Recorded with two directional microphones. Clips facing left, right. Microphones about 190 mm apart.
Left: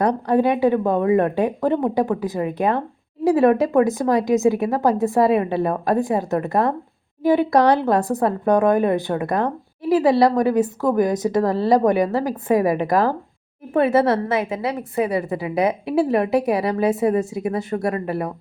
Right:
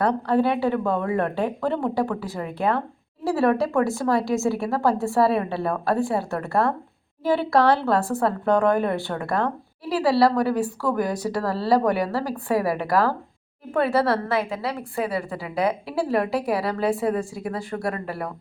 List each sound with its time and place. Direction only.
0.0 s a woman's voice: 15° left (ahead or behind)